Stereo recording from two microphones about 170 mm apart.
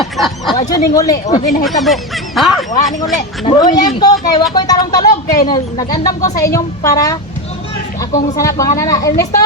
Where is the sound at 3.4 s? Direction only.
25° left (ahead or behind).